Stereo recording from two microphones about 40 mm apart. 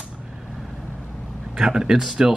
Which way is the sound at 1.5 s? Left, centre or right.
Centre.